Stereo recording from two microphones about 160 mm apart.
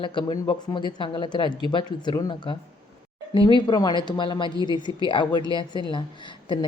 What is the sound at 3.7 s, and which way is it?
Speech, 25° left (ahead or behind).